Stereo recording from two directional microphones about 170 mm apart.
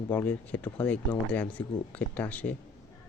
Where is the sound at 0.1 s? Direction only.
10° left (ahead or behind).